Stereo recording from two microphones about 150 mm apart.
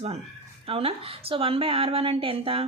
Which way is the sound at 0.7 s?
40° right (ahead or behind).